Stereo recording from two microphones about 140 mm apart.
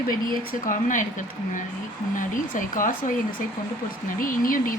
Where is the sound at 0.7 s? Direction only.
70° left (ahead or behind).